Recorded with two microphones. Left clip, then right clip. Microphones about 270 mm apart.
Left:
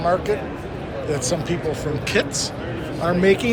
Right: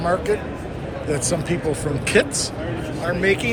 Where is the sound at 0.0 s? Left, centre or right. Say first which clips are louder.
Left 1 dB; centre.